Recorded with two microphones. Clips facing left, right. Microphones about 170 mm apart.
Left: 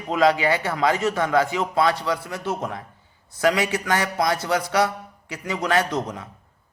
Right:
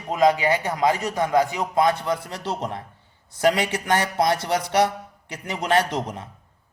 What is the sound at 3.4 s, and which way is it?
Speech, 25° right (ahead or behind).